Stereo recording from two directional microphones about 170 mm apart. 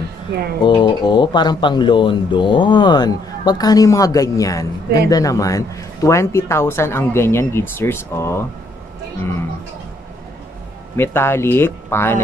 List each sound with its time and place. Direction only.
0.3 s speech: 65° right (ahead or behind)
0.7 s a woman's voice: 25° left (ahead or behind)
11.0 s a woman's voice: 15° left (ahead or behind)